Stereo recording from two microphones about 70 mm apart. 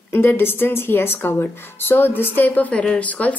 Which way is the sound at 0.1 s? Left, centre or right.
Left.